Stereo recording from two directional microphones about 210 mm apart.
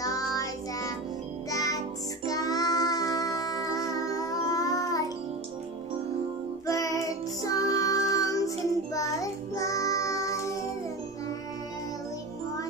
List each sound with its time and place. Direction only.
0.0 s child singing: 15° left (ahead or behind)
1.5 s music: 15° left (ahead or behind)
2.2 s child singing: 15° left (ahead or behind)
6.6 s music: 15° left (ahead or behind)
8.9 s child singing: 15° left (ahead or behind)